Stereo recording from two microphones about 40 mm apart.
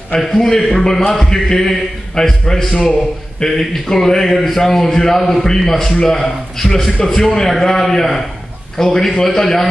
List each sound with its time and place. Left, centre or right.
0.4 s a man's voice: centre